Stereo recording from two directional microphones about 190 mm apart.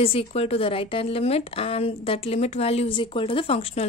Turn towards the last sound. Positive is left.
turn(degrees=30)  # may be behind; listen again after turning